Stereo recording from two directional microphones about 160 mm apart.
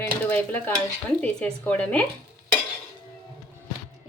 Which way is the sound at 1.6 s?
10° left (ahead or behind).